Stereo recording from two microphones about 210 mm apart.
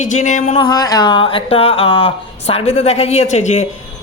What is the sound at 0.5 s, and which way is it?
Speech, 20° left (ahead or behind).